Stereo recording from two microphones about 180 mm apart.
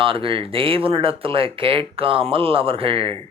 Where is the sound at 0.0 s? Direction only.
30° right (ahead or behind).